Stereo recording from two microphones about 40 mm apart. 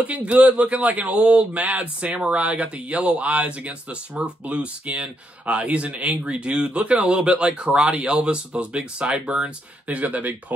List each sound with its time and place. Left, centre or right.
0.2 s speech: right
9.4 s speech: right